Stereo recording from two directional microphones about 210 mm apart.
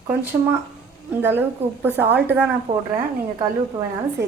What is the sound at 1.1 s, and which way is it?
A woman's voice, 10° right (ahead or behind).